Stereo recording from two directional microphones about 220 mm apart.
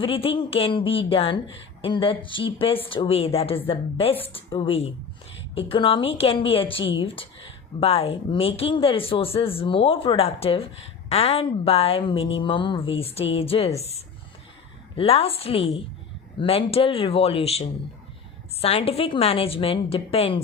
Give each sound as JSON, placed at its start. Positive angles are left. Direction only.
{"t": 0.0, "sound": "speech", "side_deg": 25}